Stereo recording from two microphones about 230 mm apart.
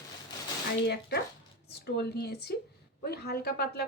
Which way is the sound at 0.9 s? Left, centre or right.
Left.